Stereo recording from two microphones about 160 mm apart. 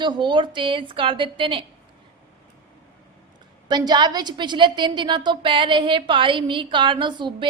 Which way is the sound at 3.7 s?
25° right (ahead or behind).